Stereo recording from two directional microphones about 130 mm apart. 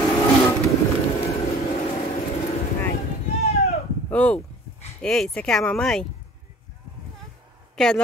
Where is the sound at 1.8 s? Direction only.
50° left (ahead or behind).